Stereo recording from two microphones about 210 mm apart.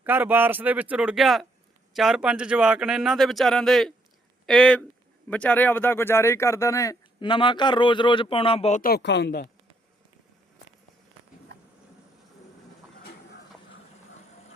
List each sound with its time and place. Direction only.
0.0 s speech: 10° right (ahead or behind); by 8.8 s 30° left (ahead or behind)
8.8 s speech: 50° left (ahead or behind)